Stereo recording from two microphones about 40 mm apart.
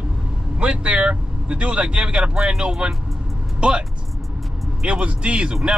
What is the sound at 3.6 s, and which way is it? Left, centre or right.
Speech, right.